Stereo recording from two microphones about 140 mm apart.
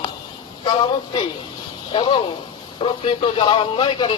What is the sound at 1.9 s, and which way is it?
Speech, 35° left (ahead or behind).